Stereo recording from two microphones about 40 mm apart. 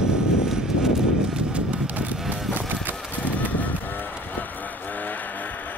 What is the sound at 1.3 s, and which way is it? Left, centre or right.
Vehicle, right.